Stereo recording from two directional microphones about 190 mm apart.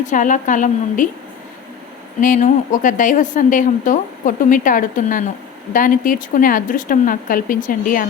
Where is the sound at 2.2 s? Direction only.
45° left (ahead or behind).